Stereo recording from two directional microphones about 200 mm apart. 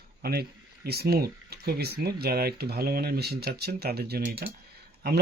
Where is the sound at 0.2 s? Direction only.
50° right (ahead or behind).